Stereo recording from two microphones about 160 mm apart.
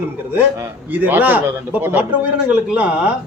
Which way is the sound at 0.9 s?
10° right (ahead or behind).